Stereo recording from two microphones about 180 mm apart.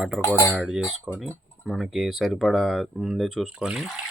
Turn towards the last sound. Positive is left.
turn(degrees=-5)  # may be behind; listen again after turning